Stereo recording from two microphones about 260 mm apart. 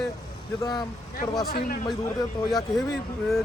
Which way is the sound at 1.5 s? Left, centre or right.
Left.